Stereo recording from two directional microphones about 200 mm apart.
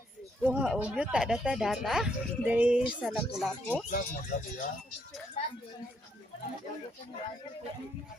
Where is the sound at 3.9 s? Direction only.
45° left (ahead or behind).